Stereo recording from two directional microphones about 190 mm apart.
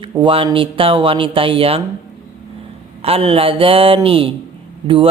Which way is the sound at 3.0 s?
30° right (ahead or behind).